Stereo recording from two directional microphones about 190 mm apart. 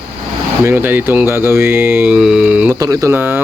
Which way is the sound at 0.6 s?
10° right (ahead or behind).